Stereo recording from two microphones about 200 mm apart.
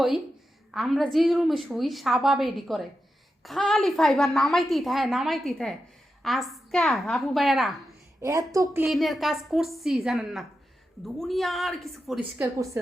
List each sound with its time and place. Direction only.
0.7 s a woman's voice: centre (ahead or behind)
8.2 s a woman's voice: 15° right (ahead or behind)
8.9 s a woman's voice: centre (ahead or behind)
12.4 s a woman's voice: 15° right (ahead or behind)